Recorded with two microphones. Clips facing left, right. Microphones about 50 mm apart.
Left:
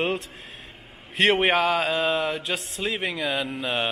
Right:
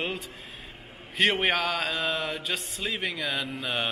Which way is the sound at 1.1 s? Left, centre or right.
Centre.